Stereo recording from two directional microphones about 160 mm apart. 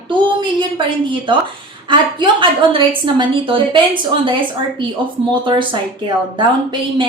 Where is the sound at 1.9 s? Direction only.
30° right (ahead or behind).